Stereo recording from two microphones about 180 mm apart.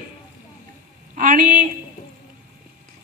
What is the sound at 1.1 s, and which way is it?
Speech, 45° right (ahead or behind).